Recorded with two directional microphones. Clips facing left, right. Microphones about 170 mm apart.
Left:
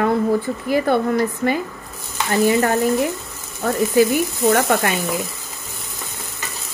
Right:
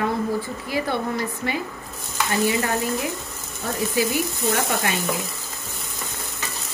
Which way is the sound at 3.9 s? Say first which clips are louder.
Left 8 dB; 50° left (ahead or behind).